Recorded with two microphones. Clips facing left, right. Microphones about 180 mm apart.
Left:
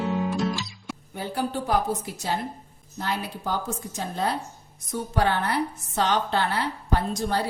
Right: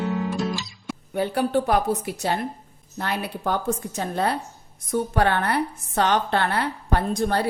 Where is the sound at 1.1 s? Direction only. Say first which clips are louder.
Right 7 dB; 65° right (ahead or behind).